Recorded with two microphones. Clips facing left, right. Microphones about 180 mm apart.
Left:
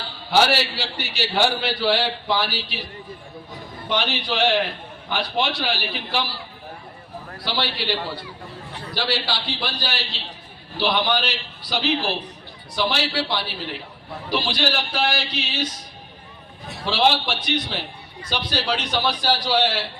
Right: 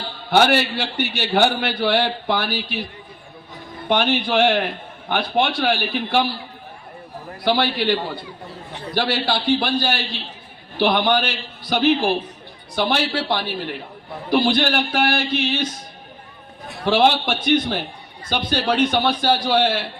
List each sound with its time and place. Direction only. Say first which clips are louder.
0.3 s a man's voice: right 3 dB; 55° right (ahead or behind)
3.8 s a man's voice: right 6 dB; 50° right (ahead or behind)
7.4 s a man's voice: right 7 dB; 50° right (ahead or behind)
16.8 s a man's voice: right 4 dB; 55° right (ahead or behind)